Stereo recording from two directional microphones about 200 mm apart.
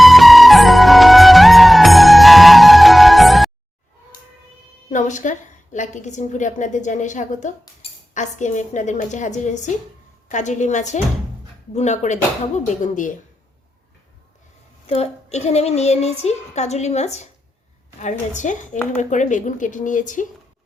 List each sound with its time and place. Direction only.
0.0 s music: centre (ahead or behind)
4.9 s a woman's voice: 40° left (ahead or behind)
14.8 s a woman's voice: 30° left (ahead or behind)